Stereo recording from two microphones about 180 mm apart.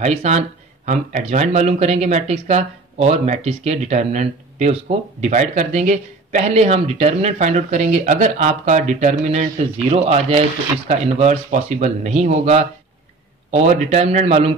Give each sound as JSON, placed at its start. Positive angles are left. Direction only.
{"t": 0.0, "sound": "speech", "side_deg": -40}